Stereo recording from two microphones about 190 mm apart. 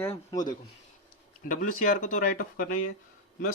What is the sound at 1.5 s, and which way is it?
Speech, 45° left (ahead or behind).